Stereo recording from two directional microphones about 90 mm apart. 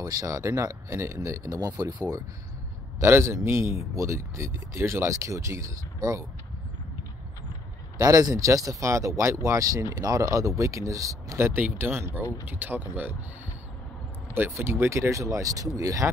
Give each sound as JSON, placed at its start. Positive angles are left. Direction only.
{"t": 0.0, "sound": "speech", "side_deg": -40}
{"t": 3.0, "sound": "speech", "side_deg": -30}
{"t": 8.0, "sound": "speech", "side_deg": -40}
{"t": 14.3, "sound": "speech", "side_deg": -25}